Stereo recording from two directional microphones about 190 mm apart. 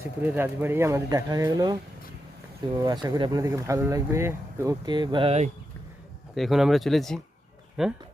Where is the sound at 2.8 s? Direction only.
20° right (ahead or behind).